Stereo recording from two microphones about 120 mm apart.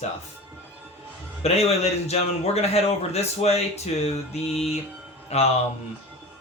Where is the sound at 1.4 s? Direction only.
60° left (ahead or behind).